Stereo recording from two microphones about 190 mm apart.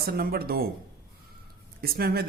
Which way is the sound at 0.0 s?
55° right (ahead or behind).